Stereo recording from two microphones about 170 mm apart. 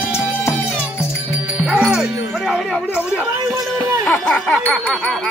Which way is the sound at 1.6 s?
5° right (ahead or behind).